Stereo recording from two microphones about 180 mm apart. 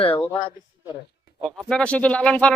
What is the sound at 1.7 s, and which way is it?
Speech, 5° left (ahead or behind).